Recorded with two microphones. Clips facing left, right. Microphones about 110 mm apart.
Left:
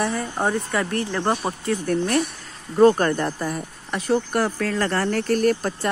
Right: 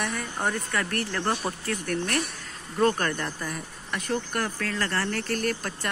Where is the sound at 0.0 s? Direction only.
30° left (ahead or behind).